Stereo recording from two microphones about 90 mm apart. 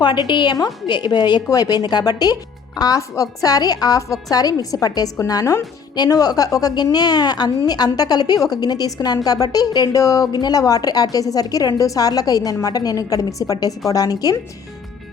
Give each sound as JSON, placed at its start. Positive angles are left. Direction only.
{"t": 0.0, "sound": "a woman's voice", "side_deg": 60}